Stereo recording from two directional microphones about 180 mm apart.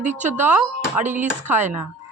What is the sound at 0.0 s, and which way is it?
A woman's voice, 40° right (ahead or behind).